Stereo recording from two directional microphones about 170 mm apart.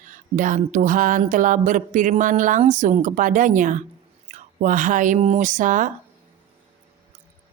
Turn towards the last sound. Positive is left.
turn(degrees=-50)  # may be behind; listen again after turning